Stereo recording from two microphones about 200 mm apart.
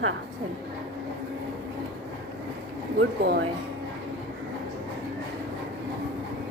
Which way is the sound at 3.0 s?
55° right (ahead or behind).